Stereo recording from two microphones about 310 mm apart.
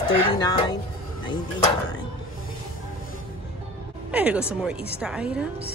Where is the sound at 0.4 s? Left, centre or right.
Centre.